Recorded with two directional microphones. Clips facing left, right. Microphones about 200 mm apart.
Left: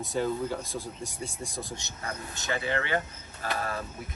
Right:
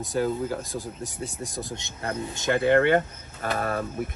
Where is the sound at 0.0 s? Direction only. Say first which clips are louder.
Right 3 dB; centre (ahead or behind).